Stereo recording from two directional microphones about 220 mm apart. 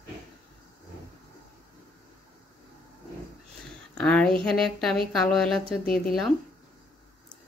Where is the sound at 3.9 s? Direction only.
5° left (ahead or behind).